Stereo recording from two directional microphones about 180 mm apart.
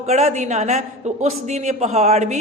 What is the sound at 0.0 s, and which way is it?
A man's voice, 40° right (ahead or behind).